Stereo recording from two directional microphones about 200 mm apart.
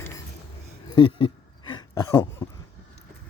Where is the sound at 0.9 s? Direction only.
25° left (ahead or behind).